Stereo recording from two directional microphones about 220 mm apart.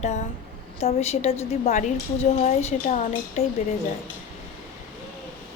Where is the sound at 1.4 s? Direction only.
30° left (ahead or behind).